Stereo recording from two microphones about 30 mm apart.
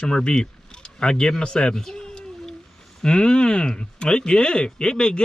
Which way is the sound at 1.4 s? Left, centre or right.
Left.